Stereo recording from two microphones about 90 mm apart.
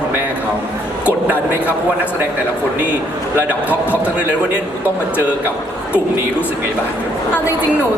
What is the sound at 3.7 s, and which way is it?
Speech, 20° left (ahead or behind).